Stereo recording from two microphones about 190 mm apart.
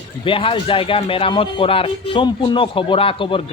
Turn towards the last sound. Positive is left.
turn(degrees=25)  # may be behind; listen again after turning